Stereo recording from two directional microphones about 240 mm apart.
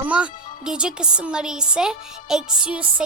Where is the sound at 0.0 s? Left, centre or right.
Centre.